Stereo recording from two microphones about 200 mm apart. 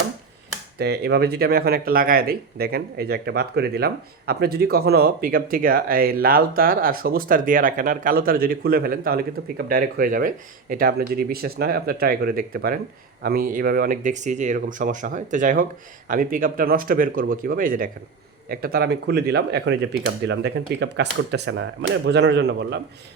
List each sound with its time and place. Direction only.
0.8 s speech: 55° right (ahead or behind)